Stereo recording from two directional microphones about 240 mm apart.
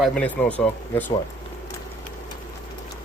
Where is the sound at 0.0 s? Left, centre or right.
Centre.